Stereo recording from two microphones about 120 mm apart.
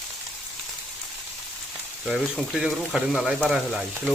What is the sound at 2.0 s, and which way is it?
Speech, 5° right (ahead or behind).